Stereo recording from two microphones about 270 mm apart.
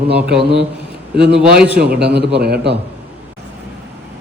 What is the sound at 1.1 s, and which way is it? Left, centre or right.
Speech, centre.